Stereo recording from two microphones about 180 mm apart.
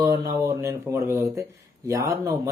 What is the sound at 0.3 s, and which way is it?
Speech, 15° right (ahead or behind).